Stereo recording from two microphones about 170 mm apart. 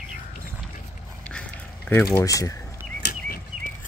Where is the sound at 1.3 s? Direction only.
10° left (ahead or behind).